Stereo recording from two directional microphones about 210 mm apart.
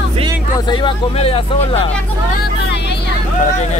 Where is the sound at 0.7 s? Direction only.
20° left (ahead or behind).